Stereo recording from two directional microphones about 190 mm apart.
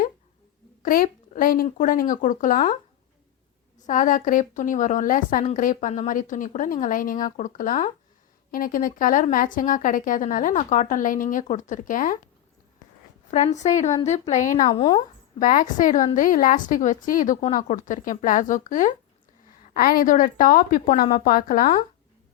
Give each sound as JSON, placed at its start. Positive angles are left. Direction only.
{"t": 0.8, "sound": "speech", "side_deg": 45}
{"t": 3.8, "sound": "speech", "side_deg": 45}
{"t": 13.3, "sound": "speech", "side_deg": 35}
{"t": 14.7, "sound": "speech", "side_deg": 25}
{"t": 15.4, "sound": "speech", "side_deg": 45}
{"t": 17.4, "sound": "speech", "side_deg": 20}
{"t": 17.7, "sound": "speech", "side_deg": 40}